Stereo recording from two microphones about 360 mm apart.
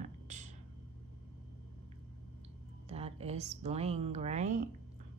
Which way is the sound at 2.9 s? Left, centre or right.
Centre.